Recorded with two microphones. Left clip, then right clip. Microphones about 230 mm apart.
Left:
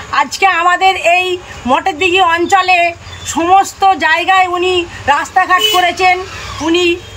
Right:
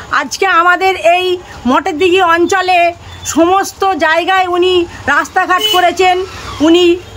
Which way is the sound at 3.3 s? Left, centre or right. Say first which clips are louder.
Left 1 dB; centre.